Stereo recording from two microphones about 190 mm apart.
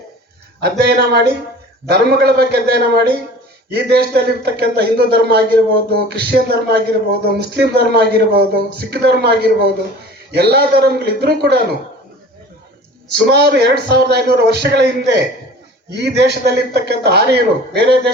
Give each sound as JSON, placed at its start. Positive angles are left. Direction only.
{"t": 0.6, "sound": "a man's voice", "side_deg": -55}
{"t": 13.3, "sound": "a man's voice", "side_deg": -60}